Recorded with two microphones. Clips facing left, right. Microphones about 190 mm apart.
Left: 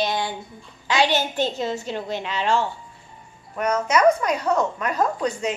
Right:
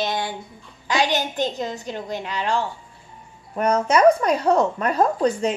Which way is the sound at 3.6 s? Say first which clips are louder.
Right 3 dB; 30° right (ahead or behind).